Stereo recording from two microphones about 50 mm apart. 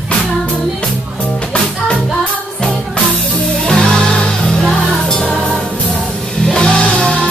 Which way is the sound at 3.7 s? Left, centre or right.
Centre.